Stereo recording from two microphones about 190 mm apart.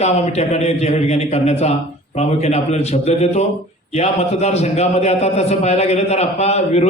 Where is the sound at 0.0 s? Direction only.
35° left (ahead or behind).